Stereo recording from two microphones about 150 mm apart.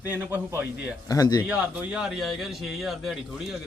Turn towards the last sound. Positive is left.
turn(degrees=0)  # may be behind; listen again after turning